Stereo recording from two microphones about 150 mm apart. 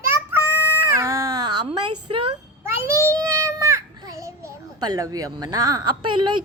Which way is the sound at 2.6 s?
15° right (ahead or behind).